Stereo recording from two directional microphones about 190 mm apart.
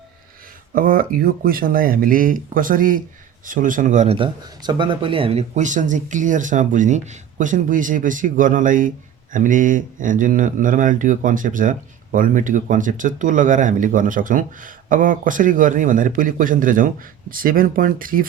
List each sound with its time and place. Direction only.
0.7 s speech: 50° right (ahead or behind)
4.4 s speech: 25° right (ahead or behind); by 18.3 s 45° right (ahead or behind)